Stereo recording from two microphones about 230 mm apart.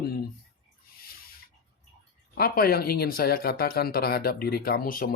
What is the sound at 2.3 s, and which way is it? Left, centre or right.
Speech, left.